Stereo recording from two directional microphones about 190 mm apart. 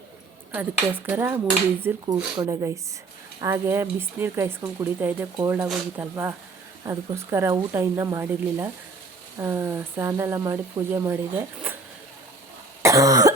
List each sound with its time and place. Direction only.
0.5 s speech: 10° right (ahead or behind)
2.4 s speech: 20° right (ahead or behind)
12.8 s cough: 15° right (ahead or behind)